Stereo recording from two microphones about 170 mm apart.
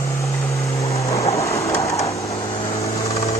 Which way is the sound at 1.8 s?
20° left (ahead or behind).